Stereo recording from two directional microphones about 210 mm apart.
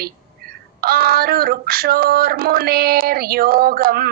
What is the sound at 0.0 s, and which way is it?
A man's voice, 45° right (ahead or behind).